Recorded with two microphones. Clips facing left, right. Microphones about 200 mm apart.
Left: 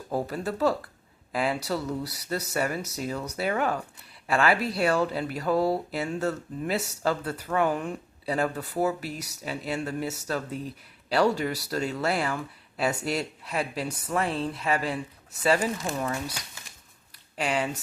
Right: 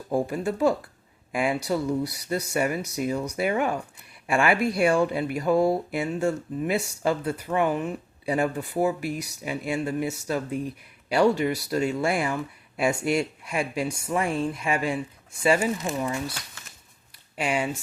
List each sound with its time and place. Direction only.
0.1 s speech: 10° right (ahead or behind)
11.7 s speech: 10° right (ahead or behind)
17.3 s speech: 10° right (ahead or behind)